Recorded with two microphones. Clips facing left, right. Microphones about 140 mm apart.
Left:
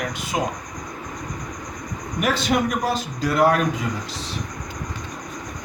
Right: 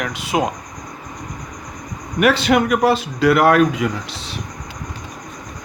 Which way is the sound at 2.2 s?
75° right (ahead or behind).